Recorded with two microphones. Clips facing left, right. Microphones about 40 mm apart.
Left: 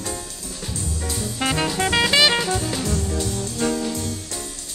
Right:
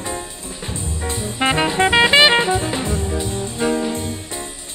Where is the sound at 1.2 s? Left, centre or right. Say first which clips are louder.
Right 5 dB; right.